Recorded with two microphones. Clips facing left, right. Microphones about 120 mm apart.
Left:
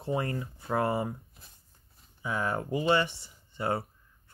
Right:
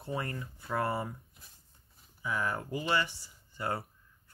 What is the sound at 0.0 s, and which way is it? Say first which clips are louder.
Speech: left 6 dB; 25° left (ahead or behind).